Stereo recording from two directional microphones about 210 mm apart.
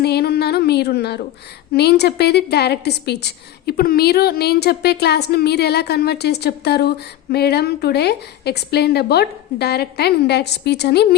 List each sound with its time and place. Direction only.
0.0 s a woman's voice: 50° left (ahead or behind)